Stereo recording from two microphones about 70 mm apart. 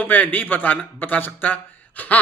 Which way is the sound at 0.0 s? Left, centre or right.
Left.